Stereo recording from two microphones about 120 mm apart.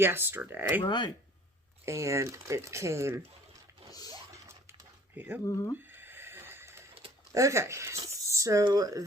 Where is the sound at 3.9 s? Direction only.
30° left (ahead or behind).